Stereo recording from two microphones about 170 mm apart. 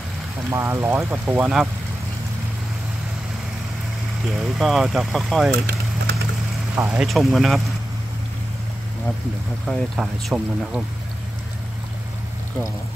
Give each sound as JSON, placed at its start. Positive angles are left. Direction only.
{"t": 0.5, "sound": "speech", "side_deg": -15}
{"t": 4.3, "sound": "speech", "side_deg": 0}
{"t": 5.5, "sound": "vehicle", "side_deg": -75}
{"t": 6.7, "sound": "speech", "side_deg": -10}
{"t": 9.7, "sound": "speech", "side_deg": 0}